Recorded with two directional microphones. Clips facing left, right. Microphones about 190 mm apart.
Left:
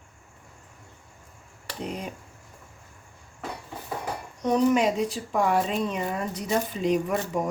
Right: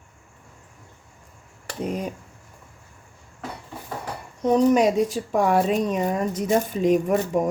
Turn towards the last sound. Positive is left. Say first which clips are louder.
# right 5 dB
turn(degrees=-50)  # may be behind; listen again after turning